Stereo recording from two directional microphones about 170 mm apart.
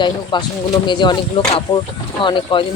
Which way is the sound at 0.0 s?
25° left (ahead or behind).